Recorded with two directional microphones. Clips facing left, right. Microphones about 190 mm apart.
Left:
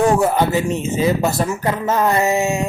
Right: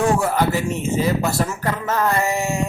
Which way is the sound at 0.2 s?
20° left (ahead or behind).